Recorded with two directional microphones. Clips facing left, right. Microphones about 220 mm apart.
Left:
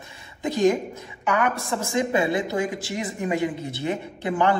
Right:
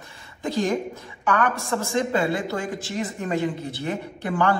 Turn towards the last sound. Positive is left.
turn(degrees=20)  # may be behind; listen again after turning